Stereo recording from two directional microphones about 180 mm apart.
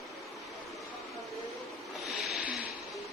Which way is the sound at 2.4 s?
10° right (ahead or behind).